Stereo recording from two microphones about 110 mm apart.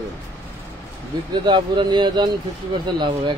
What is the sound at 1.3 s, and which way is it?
Speech, 45° right (ahead or behind).